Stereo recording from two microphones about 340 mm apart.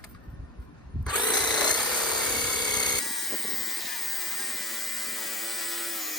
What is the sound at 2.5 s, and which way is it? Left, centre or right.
Telephone bell ringing, centre.